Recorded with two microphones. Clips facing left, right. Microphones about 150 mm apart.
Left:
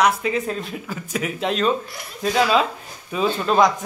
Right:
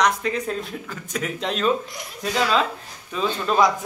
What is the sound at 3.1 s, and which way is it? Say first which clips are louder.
Speech: left 3 dB; 10° left (ahead or behind).